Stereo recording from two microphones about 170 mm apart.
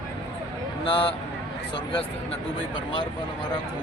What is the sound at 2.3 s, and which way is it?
Speech, 30° left (ahead or behind).